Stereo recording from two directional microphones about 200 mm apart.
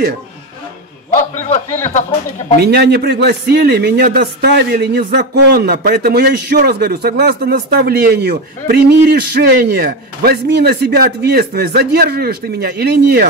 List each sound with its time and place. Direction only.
2.6 s speech: 55° right (ahead or behind)